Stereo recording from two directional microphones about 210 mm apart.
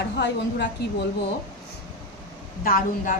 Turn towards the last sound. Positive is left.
turn(degrees=40)  # may be behind; listen again after turning